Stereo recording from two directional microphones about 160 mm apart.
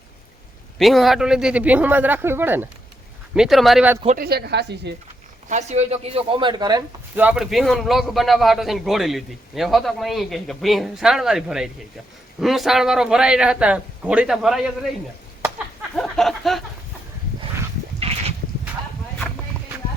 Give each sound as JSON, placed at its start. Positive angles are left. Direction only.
{"t": 0.8, "sound": "speech", "side_deg": 0}
{"t": 3.3, "sound": "a man's voice", "side_deg": 0}
{"t": 4.2, "sound": "a woman's voice", "side_deg": -85}
{"t": 5.5, "sound": "speech", "side_deg": -45}
{"t": 7.2, "sound": "a man's voice", "side_deg": -5}
{"t": 15.4, "sound": "a sound", "side_deg": -10}
{"t": 16.0, "sound": "a man's voice", "side_deg": 0}
{"t": 18.0, "sound": "goat", "side_deg": -40}